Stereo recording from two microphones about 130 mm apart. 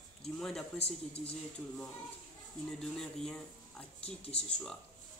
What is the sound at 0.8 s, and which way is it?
Speech, 50° left (ahead or behind).